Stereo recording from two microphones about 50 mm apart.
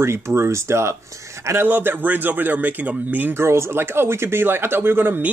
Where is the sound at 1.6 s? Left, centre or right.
Right.